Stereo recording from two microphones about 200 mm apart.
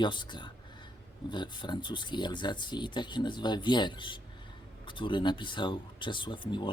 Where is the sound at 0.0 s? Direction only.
25° left (ahead or behind).